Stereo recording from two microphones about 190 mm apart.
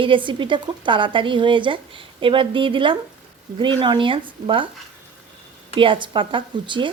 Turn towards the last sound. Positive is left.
turn(degrees=-25)  # may be behind; listen again after turning